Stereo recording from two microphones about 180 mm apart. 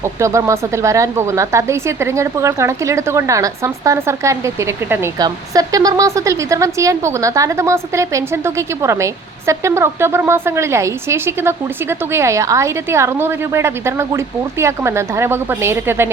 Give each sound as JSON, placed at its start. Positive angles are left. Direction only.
{"t": 0.0, "sound": "speech", "side_deg": -15}